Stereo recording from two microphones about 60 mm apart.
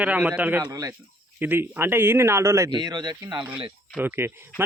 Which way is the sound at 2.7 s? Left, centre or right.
Right.